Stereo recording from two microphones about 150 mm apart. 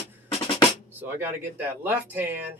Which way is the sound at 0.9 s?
15° right (ahead or behind).